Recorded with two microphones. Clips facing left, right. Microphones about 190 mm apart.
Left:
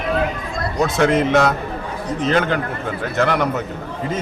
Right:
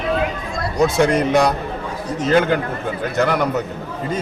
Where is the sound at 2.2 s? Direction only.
5° right (ahead or behind).